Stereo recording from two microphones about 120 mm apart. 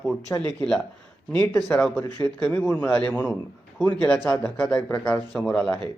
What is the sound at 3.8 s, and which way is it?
Speech, 35° right (ahead or behind).